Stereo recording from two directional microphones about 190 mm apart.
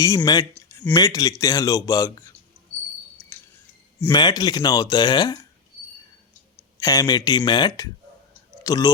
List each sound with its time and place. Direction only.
0.0 s speech: 15° left (ahead or behind)
0.5 s a sound: 10° left (ahead or behind)
0.9 s speech: 20° left (ahead or behind)
3.3 s a sound: 15° left (ahead or behind)
4.1 s speech: 20° left (ahead or behind)
6.7 s speech: 20° left (ahead or behind)